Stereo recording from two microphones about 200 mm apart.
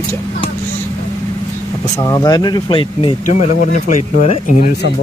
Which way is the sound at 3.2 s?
40° left (ahead or behind).